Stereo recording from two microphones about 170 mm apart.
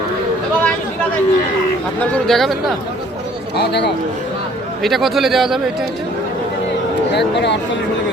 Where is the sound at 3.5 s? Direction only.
75° left (ahead or behind).